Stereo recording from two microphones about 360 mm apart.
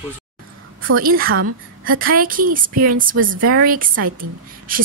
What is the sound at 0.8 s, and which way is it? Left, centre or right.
A woman's voice, right.